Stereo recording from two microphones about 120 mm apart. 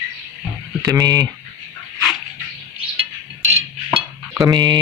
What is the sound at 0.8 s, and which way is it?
Speech, 30° right (ahead or behind).